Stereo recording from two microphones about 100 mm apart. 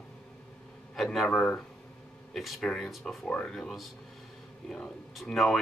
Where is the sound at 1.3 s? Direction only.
15° left (ahead or behind).